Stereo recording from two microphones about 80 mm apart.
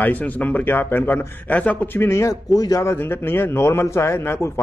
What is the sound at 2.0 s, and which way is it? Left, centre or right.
Speech, left.